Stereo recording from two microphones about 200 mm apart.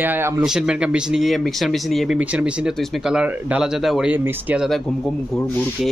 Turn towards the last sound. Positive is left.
turn(degrees=-5)  # may be behind; listen again after turning